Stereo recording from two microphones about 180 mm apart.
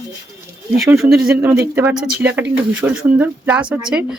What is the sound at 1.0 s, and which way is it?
Speech, centre (ahead or behind).